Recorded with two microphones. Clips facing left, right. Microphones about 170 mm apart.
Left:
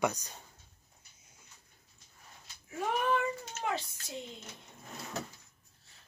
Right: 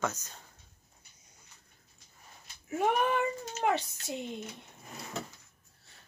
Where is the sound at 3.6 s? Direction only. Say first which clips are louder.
Right 7 dB; 65° right (ahead or behind).